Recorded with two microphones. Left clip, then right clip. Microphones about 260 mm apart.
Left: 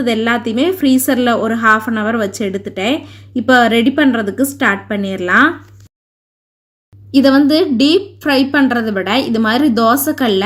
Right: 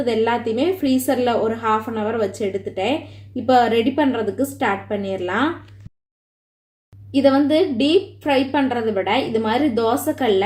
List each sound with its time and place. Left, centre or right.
0.1 s a woman's voice: left
7.1 s a woman's voice: left